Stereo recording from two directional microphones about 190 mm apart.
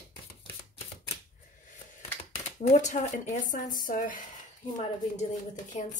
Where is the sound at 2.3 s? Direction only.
35° left (ahead or behind).